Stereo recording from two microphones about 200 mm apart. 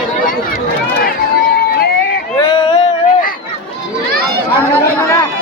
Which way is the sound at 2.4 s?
20° left (ahead or behind).